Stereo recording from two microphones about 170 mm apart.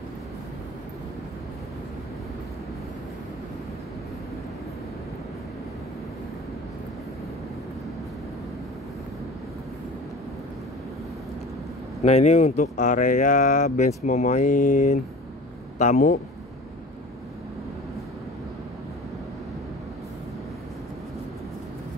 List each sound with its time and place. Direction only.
12.0 s speech: 40° left (ahead or behind)